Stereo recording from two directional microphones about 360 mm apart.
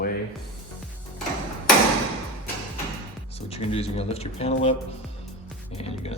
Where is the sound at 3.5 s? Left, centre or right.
Centre.